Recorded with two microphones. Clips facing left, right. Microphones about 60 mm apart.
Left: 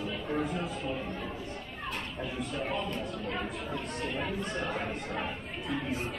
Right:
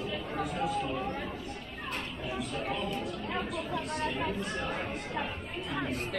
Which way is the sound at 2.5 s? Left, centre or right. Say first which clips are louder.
Left 2 dB; centre.